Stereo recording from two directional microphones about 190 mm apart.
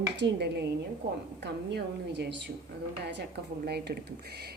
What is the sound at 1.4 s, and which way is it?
Speech, 60° right (ahead or behind).